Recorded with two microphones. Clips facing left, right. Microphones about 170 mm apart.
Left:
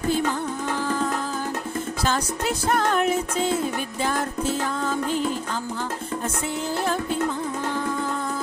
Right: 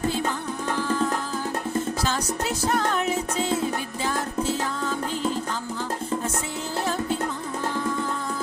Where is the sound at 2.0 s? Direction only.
55° left (ahead or behind).